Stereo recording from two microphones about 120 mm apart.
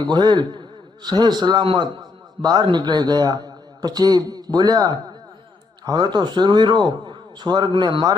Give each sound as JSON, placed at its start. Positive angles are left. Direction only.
{"t": 0.0, "sound": "a man's voice", "side_deg": -40}